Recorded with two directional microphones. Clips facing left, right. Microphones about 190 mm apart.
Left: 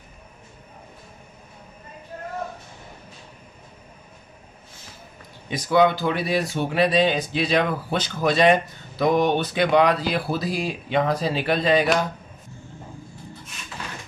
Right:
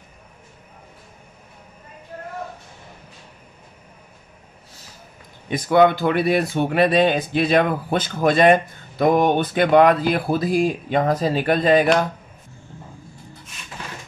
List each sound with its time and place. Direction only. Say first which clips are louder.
5.5 s speech: right 3 dB; 55° right (ahead or behind)